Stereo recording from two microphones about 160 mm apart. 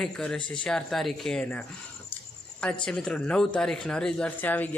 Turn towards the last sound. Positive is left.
turn(degrees=10)  # may be behind; listen again after turning